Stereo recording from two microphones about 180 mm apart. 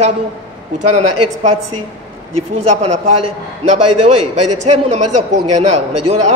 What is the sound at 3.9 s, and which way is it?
A man's voice, 40° right (ahead or behind).